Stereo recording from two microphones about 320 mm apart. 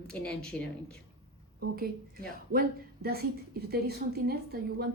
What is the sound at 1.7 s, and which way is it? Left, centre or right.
A woman's voice, right.